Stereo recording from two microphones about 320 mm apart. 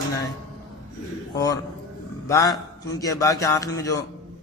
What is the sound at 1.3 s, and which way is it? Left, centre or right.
A man's voice, centre.